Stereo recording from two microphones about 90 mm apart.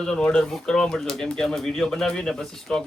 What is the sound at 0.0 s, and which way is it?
Speech, 10° left (ahead or behind).